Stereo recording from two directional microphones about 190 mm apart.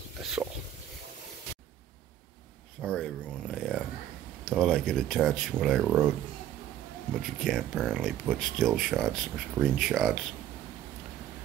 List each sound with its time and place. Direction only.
0.2 s speech: centre (ahead or behind)
2.8 s speech: 5° left (ahead or behind)
3.5 s a sound: 5° right (ahead or behind)
4.5 s speech: 5° left (ahead or behind)
7.2 s speech: centre (ahead or behind)